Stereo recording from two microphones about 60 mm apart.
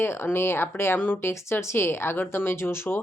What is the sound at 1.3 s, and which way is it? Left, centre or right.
Speech, left.